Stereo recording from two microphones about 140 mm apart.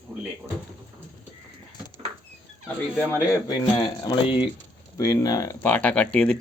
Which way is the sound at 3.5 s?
30° left (ahead or behind).